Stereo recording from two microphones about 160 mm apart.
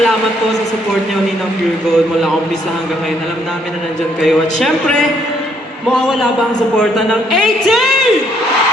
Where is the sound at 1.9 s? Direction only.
Centre (ahead or behind).